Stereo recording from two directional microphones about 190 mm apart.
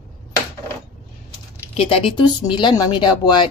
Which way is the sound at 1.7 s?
30° left (ahead or behind).